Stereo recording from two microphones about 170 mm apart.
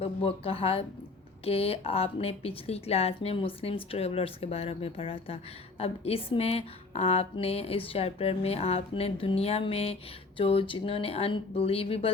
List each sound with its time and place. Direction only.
0.0 s a woman's voice: 35° left (ahead or behind)